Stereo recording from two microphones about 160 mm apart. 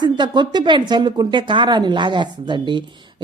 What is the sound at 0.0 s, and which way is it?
Speech, 30° right (ahead or behind).